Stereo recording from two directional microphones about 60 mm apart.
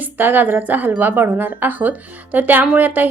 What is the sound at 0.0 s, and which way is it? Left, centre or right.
Speech, right.